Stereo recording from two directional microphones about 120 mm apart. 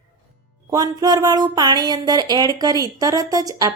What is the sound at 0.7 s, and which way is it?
Speech, 30° right (ahead or behind).